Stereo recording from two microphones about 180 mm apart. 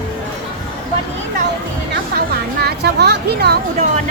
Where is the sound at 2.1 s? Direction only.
65° right (ahead or behind).